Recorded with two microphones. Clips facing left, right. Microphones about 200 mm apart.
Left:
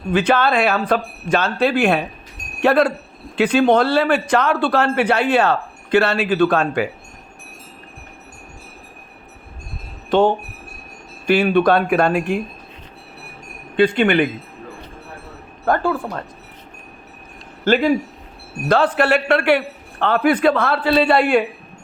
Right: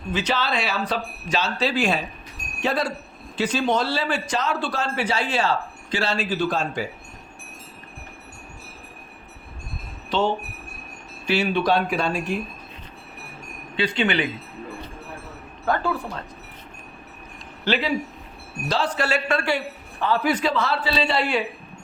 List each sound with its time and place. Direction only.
0.1 s speech: 55° left (ahead or behind)
10.1 s speech: 50° left (ahead or behind)
13.7 s speech: 55° left (ahead or behind)
15.6 s speech: 50° left (ahead or behind)
17.7 s speech: 50° left (ahead or behind)